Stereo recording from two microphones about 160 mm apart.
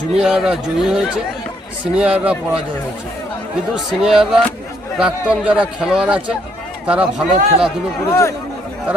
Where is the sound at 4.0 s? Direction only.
5° right (ahead or behind).